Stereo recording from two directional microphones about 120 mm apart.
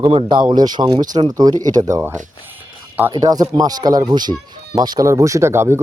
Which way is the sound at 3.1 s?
35° right (ahead or behind).